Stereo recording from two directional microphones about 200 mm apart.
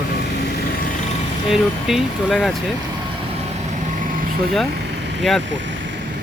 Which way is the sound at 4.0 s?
45° right (ahead or behind).